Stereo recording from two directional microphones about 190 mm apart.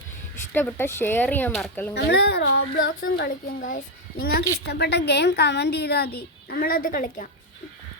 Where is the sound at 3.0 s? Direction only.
50° left (ahead or behind).